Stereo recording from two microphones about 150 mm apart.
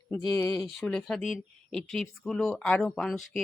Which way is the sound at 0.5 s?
Centre (ahead or behind).